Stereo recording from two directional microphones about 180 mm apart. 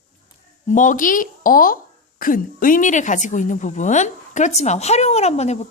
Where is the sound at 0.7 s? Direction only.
45° left (ahead or behind).